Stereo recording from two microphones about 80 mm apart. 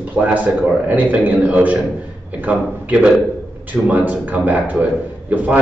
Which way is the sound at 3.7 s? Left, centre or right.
Centre.